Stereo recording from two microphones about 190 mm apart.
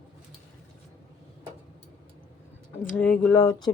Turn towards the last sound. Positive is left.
turn(degrees=15)  # may be behind; listen again after turning